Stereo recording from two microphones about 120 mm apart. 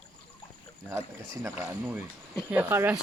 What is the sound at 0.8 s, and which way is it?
Speech, 20° right (ahead or behind).